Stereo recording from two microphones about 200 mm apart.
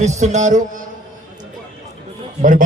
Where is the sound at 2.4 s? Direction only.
40° right (ahead or behind).